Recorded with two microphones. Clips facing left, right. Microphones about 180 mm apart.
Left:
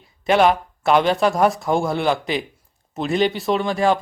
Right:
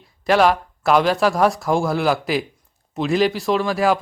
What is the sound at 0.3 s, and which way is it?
A man's voice, centre (ahead or behind).